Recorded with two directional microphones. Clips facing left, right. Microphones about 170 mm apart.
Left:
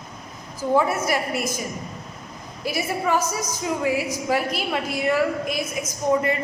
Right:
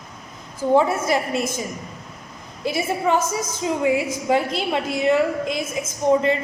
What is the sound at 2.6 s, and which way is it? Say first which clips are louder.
A woman's voice: right 3 dB; 25° right (ahead or behind).